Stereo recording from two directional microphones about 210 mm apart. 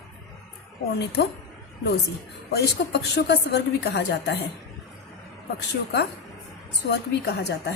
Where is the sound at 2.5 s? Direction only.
50° left (ahead or behind).